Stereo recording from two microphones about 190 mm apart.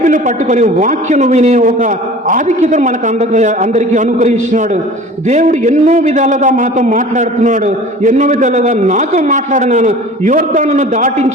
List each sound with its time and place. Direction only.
0.0 s a man's voice: 40° right (ahead or behind)